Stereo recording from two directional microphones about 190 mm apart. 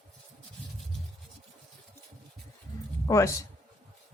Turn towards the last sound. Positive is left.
turn(degrees=15)  # may be behind; listen again after turning